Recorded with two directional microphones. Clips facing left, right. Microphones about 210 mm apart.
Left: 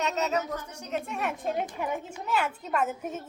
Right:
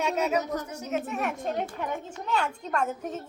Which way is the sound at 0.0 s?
10° right (ahead or behind).